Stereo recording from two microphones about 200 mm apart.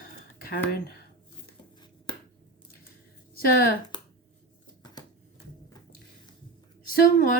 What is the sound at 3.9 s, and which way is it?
Finger snapping, 20° left (ahead or behind).